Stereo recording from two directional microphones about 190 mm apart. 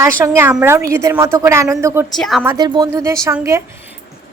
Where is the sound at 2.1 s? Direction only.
Centre (ahead or behind).